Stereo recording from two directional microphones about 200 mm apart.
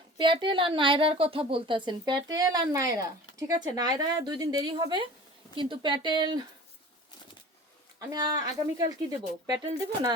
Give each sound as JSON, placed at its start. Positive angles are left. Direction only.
{"t": 0.2, "sound": "a woman's voice", "side_deg": -25}
{"t": 7.9, "sound": "a woman's voice", "side_deg": -20}